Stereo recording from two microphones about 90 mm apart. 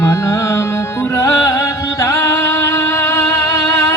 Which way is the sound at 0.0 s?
35° left (ahead or behind).